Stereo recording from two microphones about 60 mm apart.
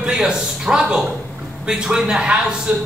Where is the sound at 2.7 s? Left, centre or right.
Right.